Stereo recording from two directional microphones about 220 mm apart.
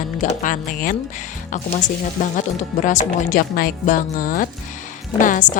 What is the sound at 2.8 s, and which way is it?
A woman's voice, 35° left (ahead or behind).